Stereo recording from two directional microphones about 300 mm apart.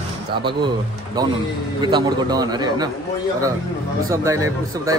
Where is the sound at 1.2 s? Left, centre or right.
Centre.